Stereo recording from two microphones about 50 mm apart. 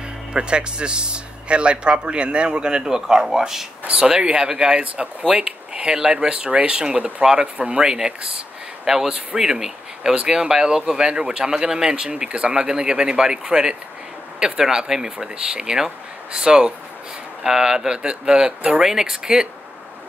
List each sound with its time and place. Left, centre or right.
0.3 s speech: centre
3.8 s speech: right